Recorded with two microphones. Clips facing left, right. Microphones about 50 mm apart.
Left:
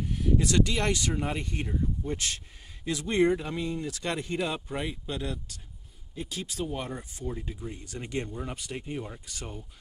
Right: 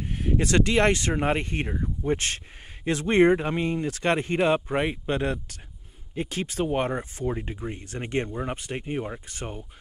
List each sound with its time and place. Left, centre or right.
0.0 s speech: right